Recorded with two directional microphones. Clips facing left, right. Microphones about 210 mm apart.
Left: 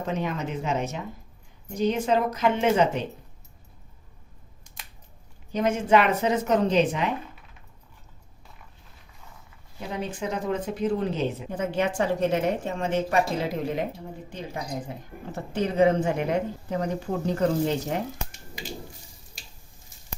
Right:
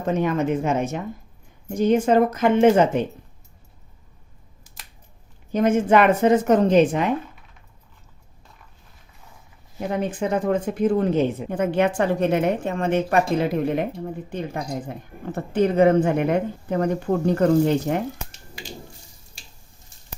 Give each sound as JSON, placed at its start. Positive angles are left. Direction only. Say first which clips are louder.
{"t": 0.1, "sound": "a woman's voice", "louder": "right 9 dB", "side_deg": -50}
{"t": 4.6, "sound": "scissors", "louder": "left 1 dB", "side_deg": 0}
{"t": 5.5, "sound": "a woman's voice", "louder": "right 4 dB", "side_deg": -50}
{"t": 9.9, "sound": "speech", "louder": "right 7 dB", "side_deg": -50}